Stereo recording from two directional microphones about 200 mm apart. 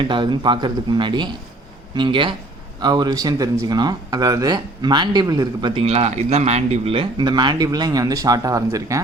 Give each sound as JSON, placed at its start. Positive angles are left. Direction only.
{"t": 0.0, "sound": "speech", "side_deg": -25}